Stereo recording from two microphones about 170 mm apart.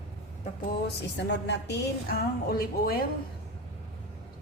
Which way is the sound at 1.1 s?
90° left.